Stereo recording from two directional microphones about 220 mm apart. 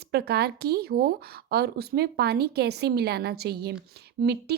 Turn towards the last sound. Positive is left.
turn(degrees=-50)  # may be behind; listen again after turning